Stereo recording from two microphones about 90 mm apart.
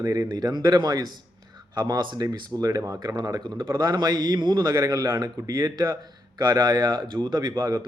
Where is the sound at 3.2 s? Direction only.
50° right (ahead or behind).